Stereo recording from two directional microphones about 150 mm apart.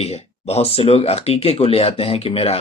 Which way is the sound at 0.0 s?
45° left (ahead or behind).